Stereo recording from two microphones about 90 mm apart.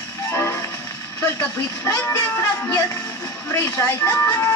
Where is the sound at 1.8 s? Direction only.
35° left (ahead or behind).